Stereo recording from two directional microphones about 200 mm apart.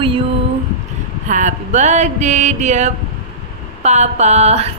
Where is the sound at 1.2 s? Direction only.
40° right (ahead or behind).